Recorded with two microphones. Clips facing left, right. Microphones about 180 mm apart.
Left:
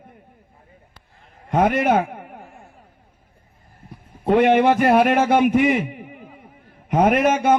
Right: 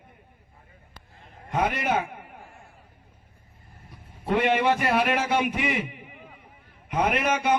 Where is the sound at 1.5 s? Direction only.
50° left (ahead or behind).